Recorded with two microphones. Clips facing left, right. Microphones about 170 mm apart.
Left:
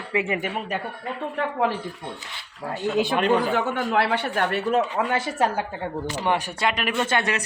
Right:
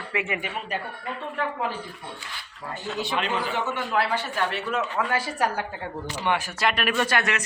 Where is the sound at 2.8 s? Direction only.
55° left (ahead or behind).